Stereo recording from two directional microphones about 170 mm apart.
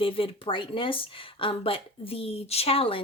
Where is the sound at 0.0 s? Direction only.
30° left (ahead or behind).